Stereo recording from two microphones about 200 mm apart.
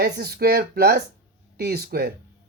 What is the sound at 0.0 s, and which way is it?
Speech, 55° right (ahead or behind).